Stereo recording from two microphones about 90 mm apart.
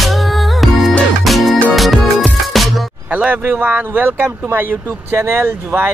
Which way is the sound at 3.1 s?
15° right (ahead or behind).